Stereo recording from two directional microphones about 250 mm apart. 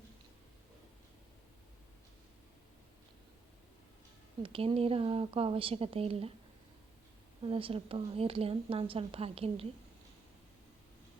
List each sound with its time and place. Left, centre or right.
4.4 s speech: right
7.4 s speech: right